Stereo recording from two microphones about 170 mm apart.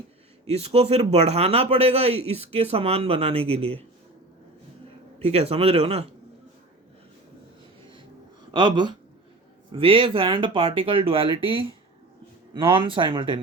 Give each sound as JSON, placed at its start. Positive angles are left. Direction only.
{"t": 0.4, "sound": "a man's voice", "side_deg": -35}
{"t": 5.2, "sound": "a man's voice", "side_deg": -40}
{"t": 8.5, "sound": "a man's voice", "side_deg": -25}